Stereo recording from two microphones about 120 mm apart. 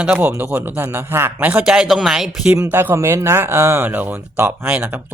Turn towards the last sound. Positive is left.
turn(degrees=-15)  # may be behind; listen again after turning